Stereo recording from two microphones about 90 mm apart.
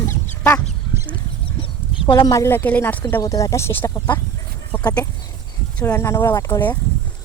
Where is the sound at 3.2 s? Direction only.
40° left (ahead or behind).